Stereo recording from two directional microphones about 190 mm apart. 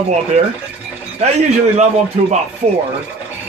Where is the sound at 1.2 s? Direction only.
35° right (ahead or behind).